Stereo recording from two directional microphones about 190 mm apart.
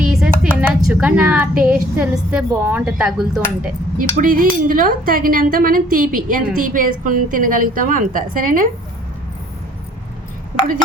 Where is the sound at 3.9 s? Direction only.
45° right (ahead or behind).